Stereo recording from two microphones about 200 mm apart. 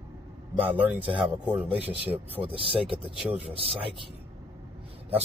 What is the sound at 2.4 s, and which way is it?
Speech, 25° right (ahead or behind).